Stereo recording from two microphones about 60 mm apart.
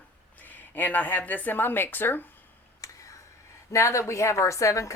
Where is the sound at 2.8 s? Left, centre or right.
Left.